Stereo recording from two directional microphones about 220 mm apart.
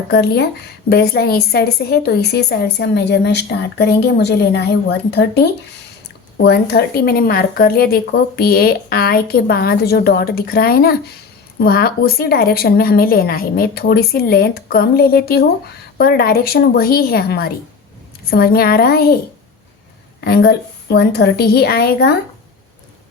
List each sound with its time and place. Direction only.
0.1 s a woman's voice: 45° left (ahead or behind)
20.2 s a woman's voice: 45° left (ahead or behind)